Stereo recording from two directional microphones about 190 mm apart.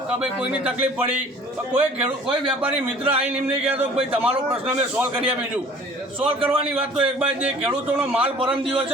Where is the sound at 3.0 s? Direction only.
30° right (ahead or behind).